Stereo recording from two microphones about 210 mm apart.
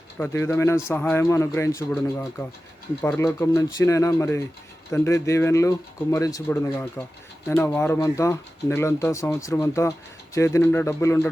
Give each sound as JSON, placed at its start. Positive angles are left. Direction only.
{"t": 0.2, "sound": "speech", "side_deg": 10}